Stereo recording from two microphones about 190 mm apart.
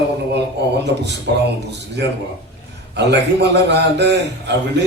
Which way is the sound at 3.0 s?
65° right (ahead or behind).